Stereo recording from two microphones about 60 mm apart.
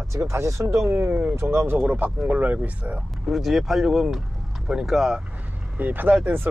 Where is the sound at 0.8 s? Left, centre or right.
Right.